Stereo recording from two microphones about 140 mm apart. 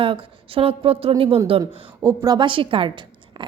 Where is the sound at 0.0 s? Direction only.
40° right (ahead or behind).